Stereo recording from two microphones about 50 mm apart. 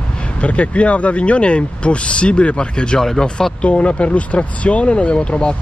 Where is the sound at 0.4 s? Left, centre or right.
Left; by 3.5 s centre.